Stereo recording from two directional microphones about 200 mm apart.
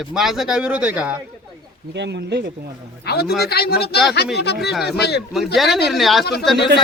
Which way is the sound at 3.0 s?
50° left (ahead or behind).